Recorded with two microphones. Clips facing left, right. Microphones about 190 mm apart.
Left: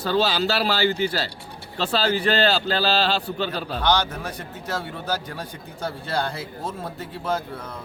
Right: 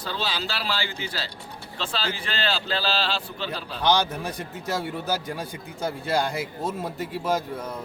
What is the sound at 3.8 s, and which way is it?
Speech, 10° right (ahead or behind).